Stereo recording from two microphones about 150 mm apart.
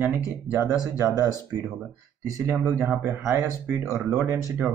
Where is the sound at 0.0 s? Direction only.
15° right (ahead or behind).